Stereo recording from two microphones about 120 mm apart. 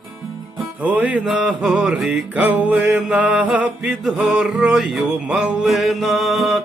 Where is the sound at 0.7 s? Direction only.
10° right (ahead or behind).